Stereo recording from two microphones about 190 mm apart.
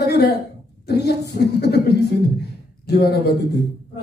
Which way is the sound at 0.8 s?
60° left (ahead or behind).